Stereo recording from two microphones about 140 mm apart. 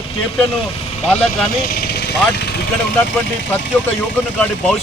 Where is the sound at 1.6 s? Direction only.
90° left.